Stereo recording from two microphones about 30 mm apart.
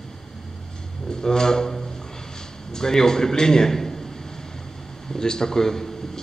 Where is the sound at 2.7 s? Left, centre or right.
Left.